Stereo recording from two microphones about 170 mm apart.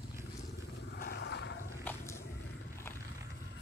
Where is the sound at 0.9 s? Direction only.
75° left (ahead or behind); by 1.6 s 90° left.